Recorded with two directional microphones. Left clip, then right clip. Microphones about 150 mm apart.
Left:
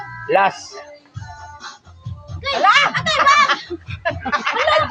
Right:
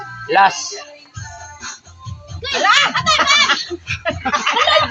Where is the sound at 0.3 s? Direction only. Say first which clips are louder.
Right 4 dB; 35° left (ahead or behind).